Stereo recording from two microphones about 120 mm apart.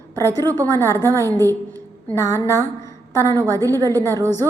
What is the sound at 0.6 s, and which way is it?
A woman's voice, 20° left (ahead or behind).